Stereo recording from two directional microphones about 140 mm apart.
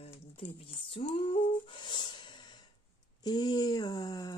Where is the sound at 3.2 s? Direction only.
30° left (ahead or behind).